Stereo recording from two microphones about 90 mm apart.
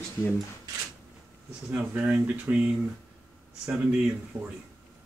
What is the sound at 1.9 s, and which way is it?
Speech, 15° right (ahead or behind).